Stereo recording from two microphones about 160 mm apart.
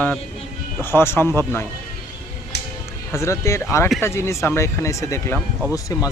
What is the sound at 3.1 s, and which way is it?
Speech, 15° left (ahead or behind).